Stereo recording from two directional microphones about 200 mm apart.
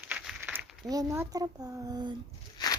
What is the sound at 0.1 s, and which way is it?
A child's voice, 10° right (ahead or behind).